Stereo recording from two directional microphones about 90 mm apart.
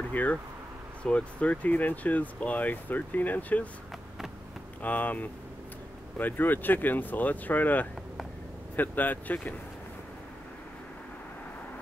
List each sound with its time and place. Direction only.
0.1 s speech: 20° left (ahead or behind)
4.8 s speech: 20° left (ahead or behind)